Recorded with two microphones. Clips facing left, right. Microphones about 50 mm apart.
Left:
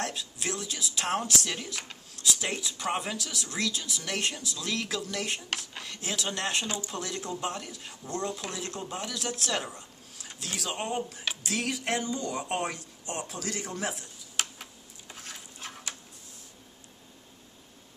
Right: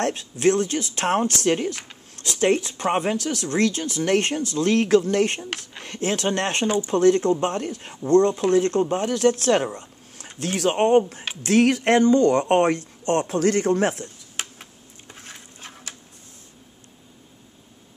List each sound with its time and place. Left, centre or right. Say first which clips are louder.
0.0 s speech: right 13 dB; right
8.1 s speech: right 17 dB; right
14.3 s tick-tock: left 3 dB; right
15.2 s a sound: right 1 dB; right